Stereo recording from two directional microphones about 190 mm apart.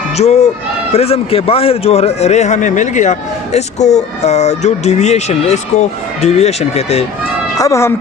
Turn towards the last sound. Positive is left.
turn(degrees=15)  # may be behind; listen again after turning